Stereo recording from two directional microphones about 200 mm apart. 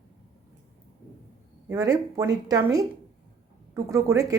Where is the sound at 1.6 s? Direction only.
15° right (ahead or behind).